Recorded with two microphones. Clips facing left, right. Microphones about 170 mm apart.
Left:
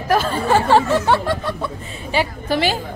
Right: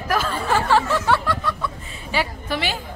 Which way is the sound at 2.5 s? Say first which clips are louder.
Left 8 dB; 35° left (ahead or behind).